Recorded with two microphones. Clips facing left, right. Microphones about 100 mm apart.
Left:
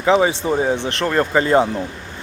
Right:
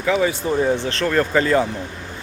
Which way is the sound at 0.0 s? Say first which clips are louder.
Left 4 dB; 25° left (ahead or behind).